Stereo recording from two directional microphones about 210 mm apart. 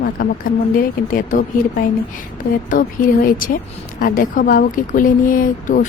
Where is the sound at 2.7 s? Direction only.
40° left (ahead or behind).